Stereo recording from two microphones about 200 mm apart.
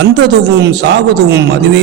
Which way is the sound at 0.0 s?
55° right (ahead or behind).